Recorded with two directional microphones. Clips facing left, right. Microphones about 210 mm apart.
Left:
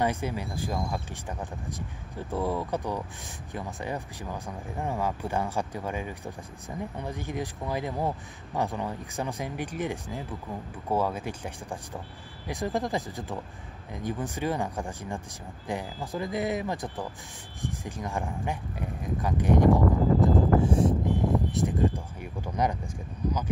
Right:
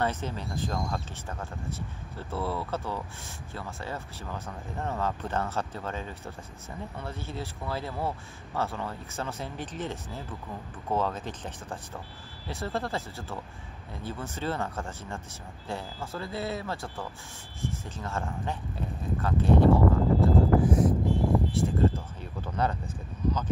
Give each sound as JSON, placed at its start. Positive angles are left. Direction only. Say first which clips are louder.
{"t": 0.0, "sound": "speech", "louder": "left 2 dB", "side_deg": 10}
{"t": 20.6, "sound": "speech", "louder": "even", "side_deg": 30}